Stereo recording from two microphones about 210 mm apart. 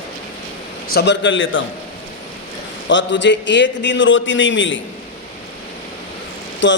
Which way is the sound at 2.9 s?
60° left (ahead or behind).